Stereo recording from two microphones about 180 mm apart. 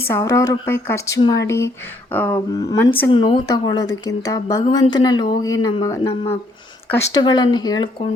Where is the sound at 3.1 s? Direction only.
30° left (ahead or behind).